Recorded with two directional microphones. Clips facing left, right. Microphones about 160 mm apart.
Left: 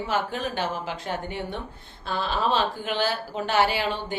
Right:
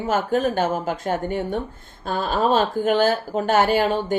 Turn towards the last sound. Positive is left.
turn(degrees=-45)  # may be behind; listen again after turning